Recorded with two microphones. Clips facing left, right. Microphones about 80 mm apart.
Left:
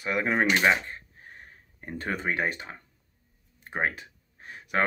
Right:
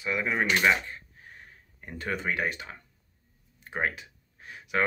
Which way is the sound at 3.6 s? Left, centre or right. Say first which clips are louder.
Left 1 dB; left.